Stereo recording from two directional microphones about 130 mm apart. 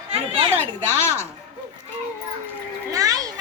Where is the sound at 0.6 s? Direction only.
20° left (ahead or behind).